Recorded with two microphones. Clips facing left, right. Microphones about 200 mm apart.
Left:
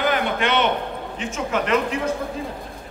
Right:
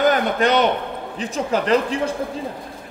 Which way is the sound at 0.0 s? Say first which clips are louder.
Right 4 dB; 40° right (ahead or behind).